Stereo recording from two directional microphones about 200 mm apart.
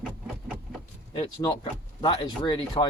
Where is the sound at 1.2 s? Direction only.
20° left (ahead or behind).